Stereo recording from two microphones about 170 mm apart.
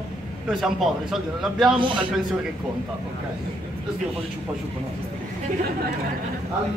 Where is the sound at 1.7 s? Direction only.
30° right (ahead or behind).